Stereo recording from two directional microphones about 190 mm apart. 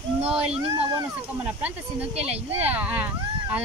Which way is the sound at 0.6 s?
30° right (ahead or behind).